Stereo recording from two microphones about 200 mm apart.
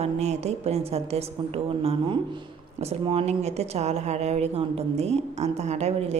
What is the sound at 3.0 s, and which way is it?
A woman's voice, 30° right (ahead or behind).